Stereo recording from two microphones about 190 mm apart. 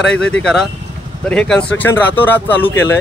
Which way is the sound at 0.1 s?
5° left (ahead or behind).